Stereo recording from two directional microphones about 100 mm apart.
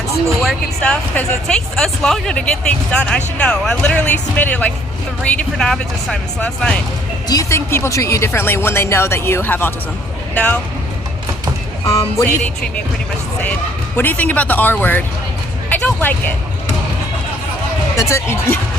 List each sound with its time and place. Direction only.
0.3 s speech: 5° left (ahead or behind)
7.3 s speech: 35° left (ahead or behind); by 10.6 s 15° left (ahead or behind)
11.9 s speech: 30° left (ahead or behind)
13.9 s speech: 20° left (ahead or behind)
17.9 s speech: 30° left (ahead or behind)